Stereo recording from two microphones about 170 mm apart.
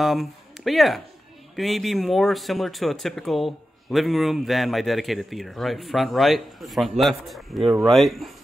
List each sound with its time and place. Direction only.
0.0 s speech: centre (ahead or behind)